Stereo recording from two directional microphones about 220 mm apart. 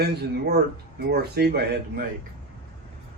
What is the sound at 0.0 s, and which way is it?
A man's voice, 45° right (ahead or behind).